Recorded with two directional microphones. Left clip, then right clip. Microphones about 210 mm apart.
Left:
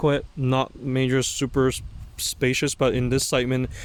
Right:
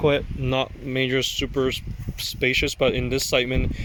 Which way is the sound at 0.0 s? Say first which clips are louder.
Right 2 dB; 5° left (ahead or behind).